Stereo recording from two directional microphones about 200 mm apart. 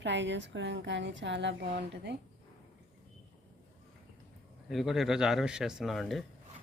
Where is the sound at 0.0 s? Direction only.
60° right (ahead or behind).